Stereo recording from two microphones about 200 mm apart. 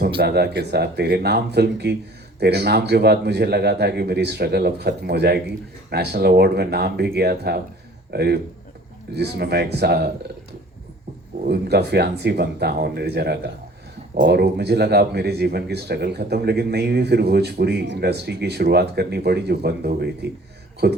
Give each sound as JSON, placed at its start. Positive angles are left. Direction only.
{"t": 0.2, "sound": "a man's voice", "side_deg": -55}
{"t": 11.4, "sound": "a man's voice", "side_deg": -55}